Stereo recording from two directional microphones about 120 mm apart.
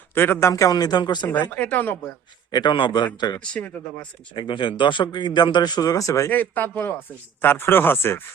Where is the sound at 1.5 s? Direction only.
15° left (ahead or behind).